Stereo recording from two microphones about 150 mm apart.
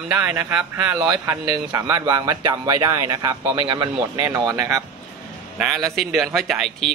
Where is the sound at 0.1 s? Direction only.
15° right (ahead or behind).